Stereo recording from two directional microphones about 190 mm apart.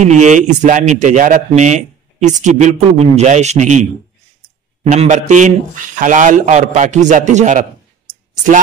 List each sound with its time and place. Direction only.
0.0 s a man's voice: 40° right (ahead or behind)
4.9 s a man's voice: 35° right (ahead or behind)